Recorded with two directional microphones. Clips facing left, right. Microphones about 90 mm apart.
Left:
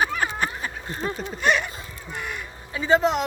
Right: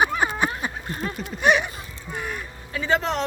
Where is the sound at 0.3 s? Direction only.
15° right (ahead or behind).